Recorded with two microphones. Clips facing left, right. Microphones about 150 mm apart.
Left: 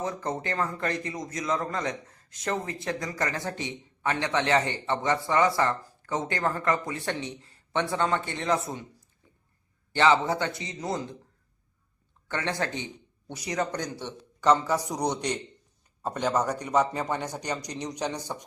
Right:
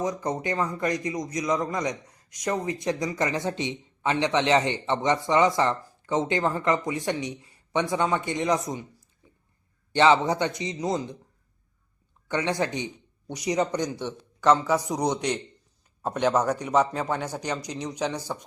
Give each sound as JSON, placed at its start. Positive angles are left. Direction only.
{"t": 0.0, "sound": "a man's voice", "side_deg": -15}
{"t": 9.9, "sound": "a man's voice", "side_deg": -20}
{"t": 12.3, "sound": "a man's voice", "side_deg": -15}
{"t": 14.5, "sound": "a man's voice", "side_deg": -5}
{"t": 16.3, "sound": "a man's voice", "side_deg": -10}